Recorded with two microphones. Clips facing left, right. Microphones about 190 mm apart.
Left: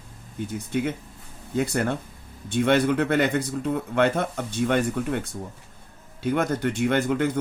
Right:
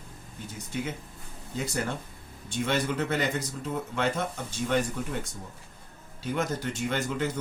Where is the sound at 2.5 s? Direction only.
60° left (ahead or behind).